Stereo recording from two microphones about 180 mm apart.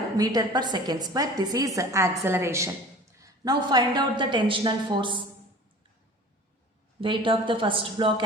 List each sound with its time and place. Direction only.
0.2 s a woman's voice: 20° right (ahead or behind)
7.0 s a woman's voice: 30° right (ahead or behind)